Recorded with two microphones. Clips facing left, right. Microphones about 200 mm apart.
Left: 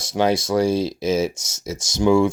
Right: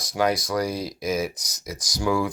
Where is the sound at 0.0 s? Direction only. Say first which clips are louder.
Left 4 dB; 25° left (ahead or behind).